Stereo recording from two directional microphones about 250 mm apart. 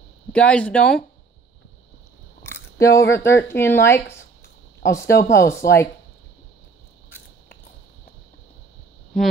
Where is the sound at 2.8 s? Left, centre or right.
Centre.